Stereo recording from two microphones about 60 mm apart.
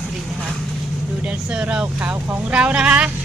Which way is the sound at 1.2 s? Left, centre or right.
Centre.